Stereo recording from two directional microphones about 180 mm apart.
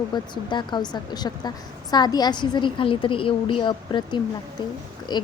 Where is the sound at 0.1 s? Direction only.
25° left (ahead or behind).